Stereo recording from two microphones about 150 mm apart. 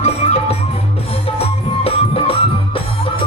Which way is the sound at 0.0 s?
45° left (ahead or behind).